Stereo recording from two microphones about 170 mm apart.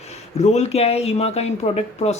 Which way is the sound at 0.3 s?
40° left (ahead or behind).